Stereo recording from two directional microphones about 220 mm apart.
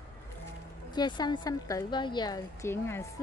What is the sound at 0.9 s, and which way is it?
A woman's voice, 20° left (ahead or behind).